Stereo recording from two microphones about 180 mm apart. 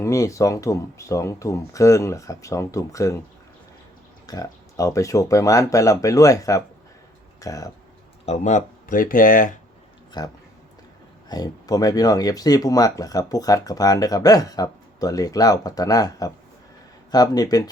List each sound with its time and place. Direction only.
0.0 s speech: 15° left (ahead or behind)
4.3 s speech: 20° left (ahead or behind)
8.3 s speech: 40° left (ahead or behind)
10.1 s speech: 20° left (ahead or behind)